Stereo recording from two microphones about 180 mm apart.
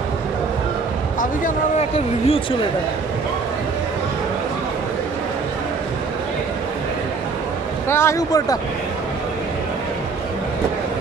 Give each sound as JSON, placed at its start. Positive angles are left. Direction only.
{"t": 1.4, "sound": "speech", "side_deg": 35}
{"t": 7.9, "sound": "speech", "side_deg": 15}